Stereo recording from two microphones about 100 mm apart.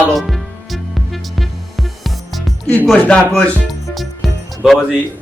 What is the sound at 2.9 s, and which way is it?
Speech, 10° left (ahead or behind).